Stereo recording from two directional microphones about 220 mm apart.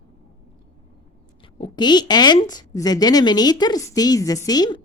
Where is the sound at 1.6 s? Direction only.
20° left (ahead or behind).